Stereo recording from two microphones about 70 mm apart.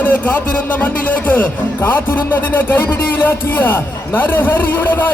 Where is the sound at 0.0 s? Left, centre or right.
Left.